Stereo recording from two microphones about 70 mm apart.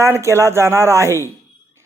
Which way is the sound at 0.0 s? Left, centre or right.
Right.